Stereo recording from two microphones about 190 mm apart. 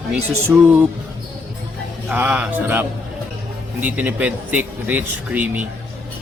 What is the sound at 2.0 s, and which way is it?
Speech, 10° right (ahead or behind).